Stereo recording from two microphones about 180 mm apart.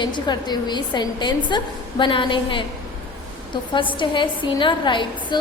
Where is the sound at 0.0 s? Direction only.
25° left (ahead or behind).